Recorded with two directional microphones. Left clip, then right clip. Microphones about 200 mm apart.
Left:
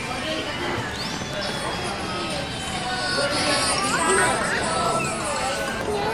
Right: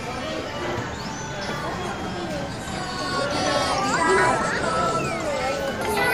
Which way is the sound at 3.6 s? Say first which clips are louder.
Right 1 dB; 30° right (ahead or behind).